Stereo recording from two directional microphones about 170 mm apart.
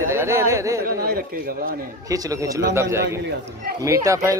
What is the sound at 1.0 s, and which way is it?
Speech, 60° right (ahead or behind).